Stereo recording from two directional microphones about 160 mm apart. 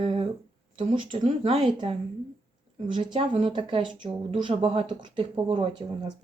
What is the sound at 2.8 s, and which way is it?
Speech, 35° right (ahead or behind).